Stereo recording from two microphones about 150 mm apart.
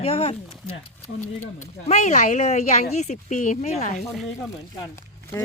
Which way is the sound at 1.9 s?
50° left (ahead or behind).